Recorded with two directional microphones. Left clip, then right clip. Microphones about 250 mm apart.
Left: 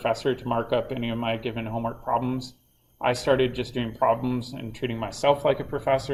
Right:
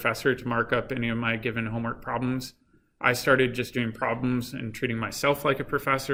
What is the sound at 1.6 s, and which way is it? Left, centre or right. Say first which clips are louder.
Speech: left 4 dB; right.